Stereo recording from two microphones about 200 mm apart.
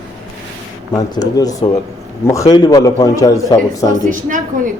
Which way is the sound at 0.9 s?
20° left (ahead or behind).